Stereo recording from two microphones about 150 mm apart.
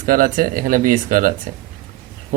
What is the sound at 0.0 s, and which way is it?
Speech, 70° right (ahead or behind).